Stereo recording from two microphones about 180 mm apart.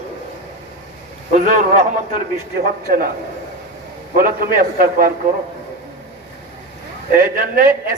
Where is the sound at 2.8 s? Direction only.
55° right (ahead or behind).